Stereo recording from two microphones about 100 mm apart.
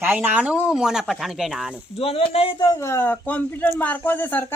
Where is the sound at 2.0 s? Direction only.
75° left (ahead or behind).